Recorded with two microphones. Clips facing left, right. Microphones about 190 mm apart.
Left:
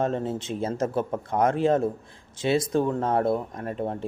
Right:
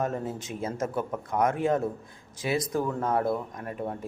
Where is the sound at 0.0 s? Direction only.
30° left (ahead or behind).